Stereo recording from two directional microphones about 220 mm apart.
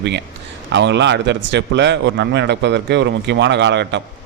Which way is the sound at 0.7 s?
55° right (ahead or behind).